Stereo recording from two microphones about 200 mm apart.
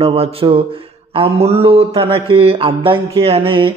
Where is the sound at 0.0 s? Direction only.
30° right (ahead or behind).